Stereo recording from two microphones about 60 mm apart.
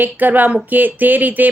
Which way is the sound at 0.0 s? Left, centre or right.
Right.